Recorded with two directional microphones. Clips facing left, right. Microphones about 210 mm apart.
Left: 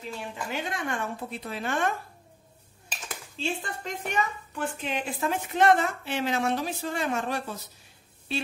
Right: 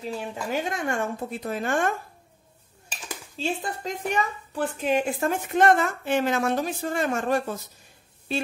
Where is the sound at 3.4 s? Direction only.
35° right (ahead or behind).